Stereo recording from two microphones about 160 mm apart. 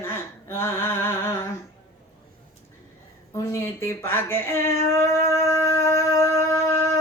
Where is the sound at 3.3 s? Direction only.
20° left (ahead or behind).